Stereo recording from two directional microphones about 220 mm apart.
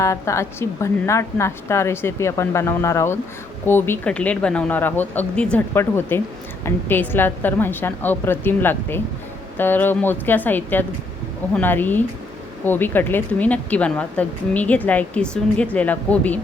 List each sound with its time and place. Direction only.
0.0 s a woman's voice: 15° left (ahead or behind)